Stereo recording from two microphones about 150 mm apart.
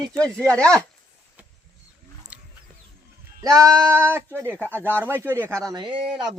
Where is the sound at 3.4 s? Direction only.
25° right (ahead or behind).